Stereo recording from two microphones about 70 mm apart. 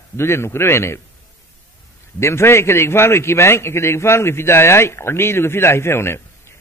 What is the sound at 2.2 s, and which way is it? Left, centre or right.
A man's voice, left.